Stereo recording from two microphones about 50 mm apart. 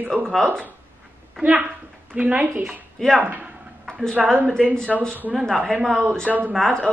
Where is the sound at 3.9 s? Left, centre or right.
Centre.